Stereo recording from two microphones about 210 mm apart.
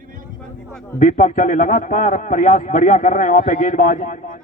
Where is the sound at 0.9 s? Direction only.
40° left (ahead or behind).